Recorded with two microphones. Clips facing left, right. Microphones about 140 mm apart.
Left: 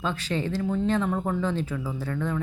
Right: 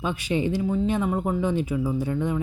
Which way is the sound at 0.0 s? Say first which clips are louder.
Right 3 dB; 15° right (ahead or behind).